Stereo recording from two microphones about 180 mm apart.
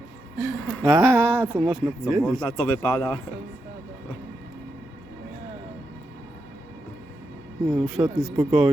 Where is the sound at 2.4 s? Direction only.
15° left (ahead or behind).